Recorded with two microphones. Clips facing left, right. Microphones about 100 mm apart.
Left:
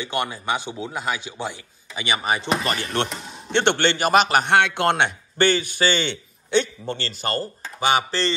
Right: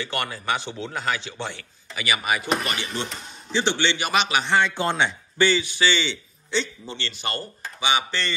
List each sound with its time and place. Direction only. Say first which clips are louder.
0.0 s speech: left 3 dB; 20° left (ahead or behind)
2.0 s speech: left 1 dB; 30° left (ahead or behind)
3.5 s a man's voice: left 4 dB; 55° left (ahead or behind)
7.0 s speech: left 3 dB; 40° left (ahead or behind)